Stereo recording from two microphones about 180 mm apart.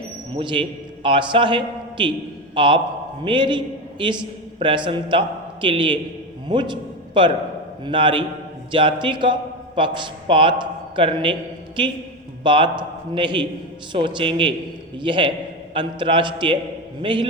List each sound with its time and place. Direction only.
0.3 s a man's voice: 30° right (ahead or behind)
12.4 s a man's voice: 25° right (ahead or behind)